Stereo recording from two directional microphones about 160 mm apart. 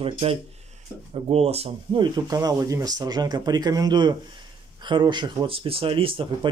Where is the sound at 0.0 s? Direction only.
35° right (ahead or behind).